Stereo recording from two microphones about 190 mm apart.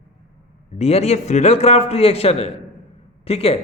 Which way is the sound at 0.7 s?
35° left (ahead or behind).